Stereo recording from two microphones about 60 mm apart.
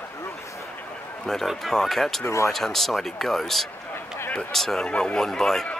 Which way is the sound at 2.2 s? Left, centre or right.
Left.